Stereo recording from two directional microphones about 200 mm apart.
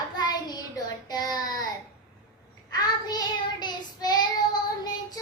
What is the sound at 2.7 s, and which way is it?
Child singing, 20° left (ahead or behind).